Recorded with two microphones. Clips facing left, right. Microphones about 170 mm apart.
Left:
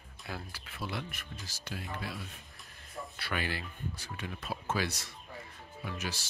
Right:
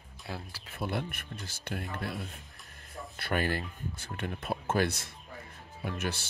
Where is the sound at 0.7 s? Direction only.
50° right (ahead or behind).